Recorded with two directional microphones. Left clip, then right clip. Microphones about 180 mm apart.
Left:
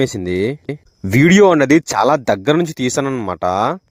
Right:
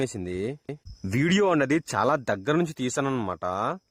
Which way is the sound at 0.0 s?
40° left (ahead or behind).